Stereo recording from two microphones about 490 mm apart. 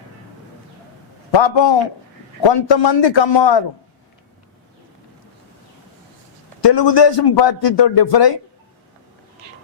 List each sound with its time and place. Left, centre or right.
1.3 s a man's voice: left
6.6 s a man's voice: left